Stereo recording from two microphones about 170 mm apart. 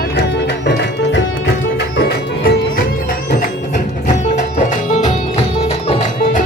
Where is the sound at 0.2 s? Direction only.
90° left.